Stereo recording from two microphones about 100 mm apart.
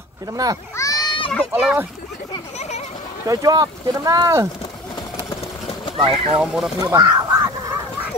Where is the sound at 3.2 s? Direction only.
35° right (ahead or behind).